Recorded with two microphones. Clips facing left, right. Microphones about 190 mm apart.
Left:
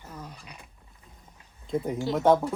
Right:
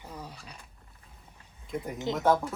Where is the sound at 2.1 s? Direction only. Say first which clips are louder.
Left 4 dB; 25° left (ahead or behind).